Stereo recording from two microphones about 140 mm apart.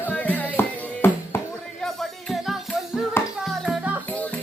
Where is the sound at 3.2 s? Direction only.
15° left (ahead or behind).